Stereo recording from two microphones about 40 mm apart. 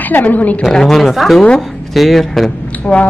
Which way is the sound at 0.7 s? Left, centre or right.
Centre.